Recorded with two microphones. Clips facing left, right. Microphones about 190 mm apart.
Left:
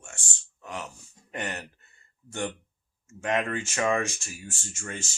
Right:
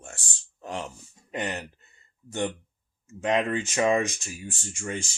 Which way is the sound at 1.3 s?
15° right (ahead or behind).